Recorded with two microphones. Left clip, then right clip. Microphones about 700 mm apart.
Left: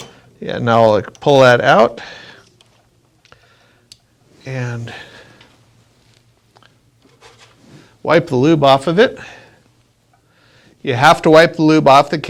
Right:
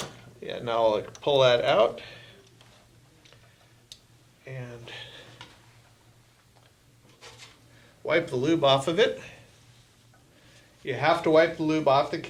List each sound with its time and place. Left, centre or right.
0.3 s speech: left
4.4 s speech: left
8.0 s speech: left
10.8 s speech: left